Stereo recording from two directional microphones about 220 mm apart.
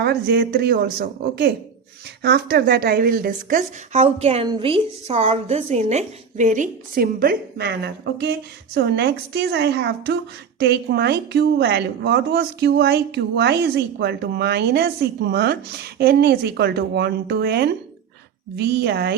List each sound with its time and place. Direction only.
0.0 s a woman's voice: 45° right (ahead or behind)
4.0 s a woman's voice: 25° right (ahead or behind); by 19.1 s 45° right (ahead or behind)